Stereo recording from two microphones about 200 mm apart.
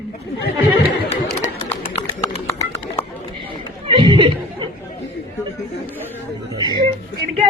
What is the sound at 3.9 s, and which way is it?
Speech, 25° right (ahead or behind).